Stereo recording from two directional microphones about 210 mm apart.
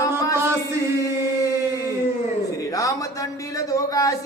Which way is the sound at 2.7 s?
15° left (ahead or behind).